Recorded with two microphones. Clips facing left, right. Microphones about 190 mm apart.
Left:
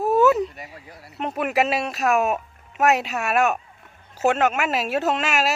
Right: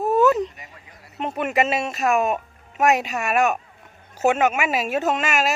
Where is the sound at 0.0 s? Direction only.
5° left (ahead or behind).